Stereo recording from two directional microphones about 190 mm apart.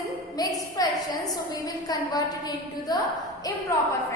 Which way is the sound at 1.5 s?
20° left (ahead or behind).